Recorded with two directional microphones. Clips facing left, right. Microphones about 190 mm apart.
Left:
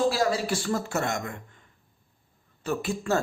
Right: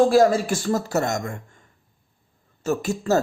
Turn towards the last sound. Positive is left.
turn(degrees=-40)  # may be behind; listen again after turning